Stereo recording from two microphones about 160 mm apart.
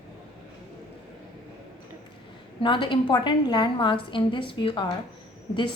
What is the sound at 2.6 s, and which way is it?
A woman's voice, 30° left (ahead or behind).